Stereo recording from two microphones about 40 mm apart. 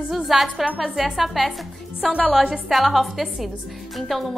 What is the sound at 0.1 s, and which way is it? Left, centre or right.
A woman's voice, centre.